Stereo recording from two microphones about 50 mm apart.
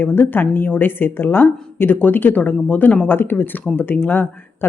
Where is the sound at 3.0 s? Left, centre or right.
Left.